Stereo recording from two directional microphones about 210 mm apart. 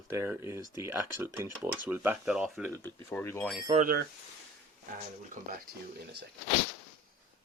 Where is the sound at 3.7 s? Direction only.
45° right (ahead or behind).